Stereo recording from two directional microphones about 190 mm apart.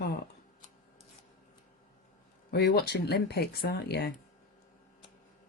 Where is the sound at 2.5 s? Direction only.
60° left (ahead or behind).